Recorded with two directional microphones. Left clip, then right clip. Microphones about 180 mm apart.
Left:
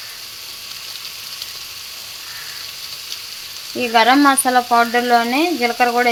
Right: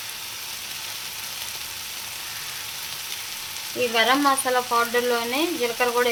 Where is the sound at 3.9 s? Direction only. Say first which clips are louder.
Left 8 dB; 40° left (ahead or behind).